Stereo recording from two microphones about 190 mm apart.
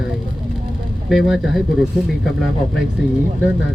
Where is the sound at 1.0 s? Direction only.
Centre (ahead or behind).